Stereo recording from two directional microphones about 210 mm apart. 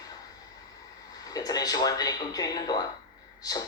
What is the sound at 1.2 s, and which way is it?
Speech, 15° left (ahead or behind).